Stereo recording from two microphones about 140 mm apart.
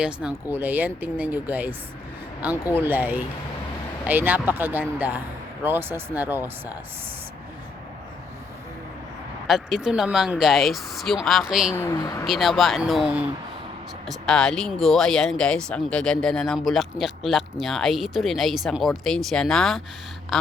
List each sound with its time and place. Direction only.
0.0 s speech: 5° right (ahead or behind)
2.8 s speech: 15° right (ahead or behind)
9.5 s speech: centre (ahead or behind)
11.7 s speech: 20° left (ahead or behind)
12.2 s speech: centre (ahead or behind)
20.3 s quack: centre (ahead or behind)